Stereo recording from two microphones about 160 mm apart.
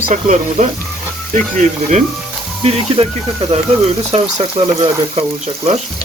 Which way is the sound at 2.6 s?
40° right (ahead or behind).